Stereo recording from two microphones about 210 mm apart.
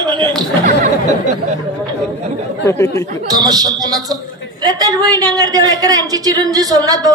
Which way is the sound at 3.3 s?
20° right (ahead or behind).